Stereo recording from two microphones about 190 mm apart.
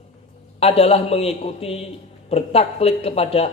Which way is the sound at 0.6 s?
30° left (ahead or behind).